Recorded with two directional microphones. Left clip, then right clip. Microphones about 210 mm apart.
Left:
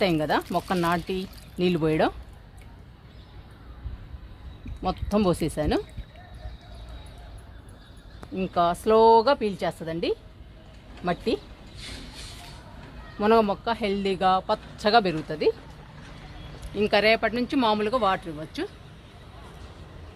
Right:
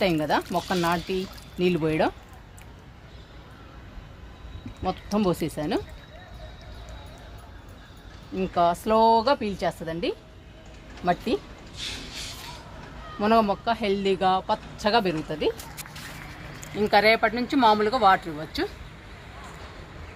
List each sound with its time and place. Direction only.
0.0 s speech: 40° left (ahead or behind)
5.1 s speech: 45° left (ahead or behind)
8.4 s speech: 40° left (ahead or behind)
13.1 s speech: 40° left (ahead or behind)
16.7 s speech: 45° left (ahead or behind)